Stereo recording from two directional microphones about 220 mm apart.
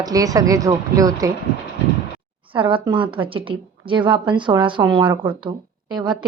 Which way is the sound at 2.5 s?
25° right (ahead or behind).